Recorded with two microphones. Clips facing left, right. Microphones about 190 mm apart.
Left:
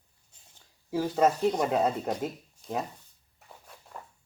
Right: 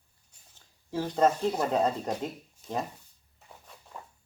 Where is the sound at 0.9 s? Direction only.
10° left (ahead or behind).